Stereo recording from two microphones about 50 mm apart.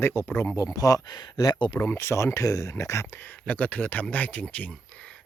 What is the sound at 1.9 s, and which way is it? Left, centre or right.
Speech, left.